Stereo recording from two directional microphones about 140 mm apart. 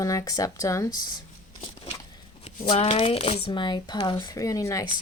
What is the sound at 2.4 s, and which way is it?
A woman's voice, 50° left (ahead or behind).